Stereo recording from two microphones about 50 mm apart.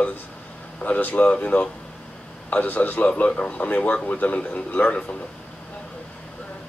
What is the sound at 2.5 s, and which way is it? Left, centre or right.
Speech, left.